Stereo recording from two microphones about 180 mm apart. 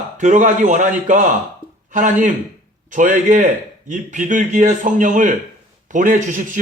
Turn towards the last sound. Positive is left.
turn(degrees=-45)  # may be behind; listen again after turning